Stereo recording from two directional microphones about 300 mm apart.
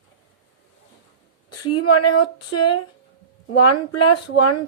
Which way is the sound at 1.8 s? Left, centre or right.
Left.